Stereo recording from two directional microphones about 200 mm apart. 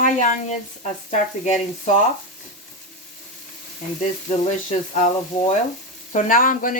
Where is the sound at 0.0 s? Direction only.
40° left (ahead or behind).